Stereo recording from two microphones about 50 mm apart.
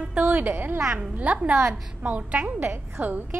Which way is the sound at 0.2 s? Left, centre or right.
Right.